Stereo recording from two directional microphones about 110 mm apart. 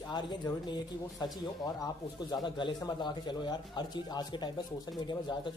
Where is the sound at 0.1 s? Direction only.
40° left (ahead or behind).